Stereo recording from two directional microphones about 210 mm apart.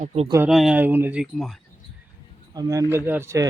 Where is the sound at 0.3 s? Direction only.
10° right (ahead or behind).